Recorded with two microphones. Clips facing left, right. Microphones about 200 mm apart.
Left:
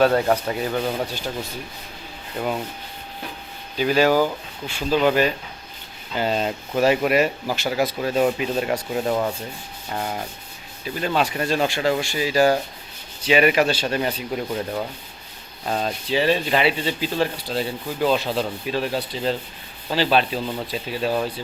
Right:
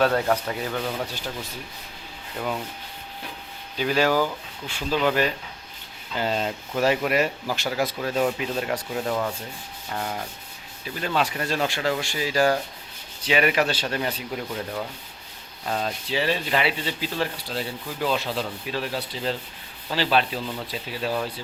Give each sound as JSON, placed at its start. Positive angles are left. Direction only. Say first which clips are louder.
{"t": 0.1, "sound": "speech", "louder": "left 3 dB", "side_deg": 25}
{"t": 3.8, "sound": "rub", "louder": "left 4 dB", "side_deg": 10}
{"t": 9.9, "sound": "speech", "louder": "left 3 dB", "side_deg": 20}
{"t": 10.8, "sound": "rub", "louder": "left 3 dB", "side_deg": 20}
{"t": 15.6, "sound": "speech", "louder": "left 3 dB", "side_deg": 25}